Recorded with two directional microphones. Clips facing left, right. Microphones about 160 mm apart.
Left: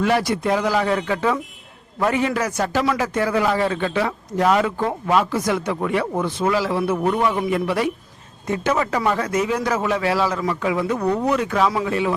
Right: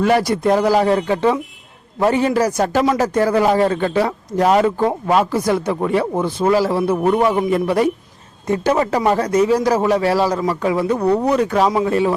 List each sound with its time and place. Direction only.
0.0 s speech: 40° right (ahead or behind)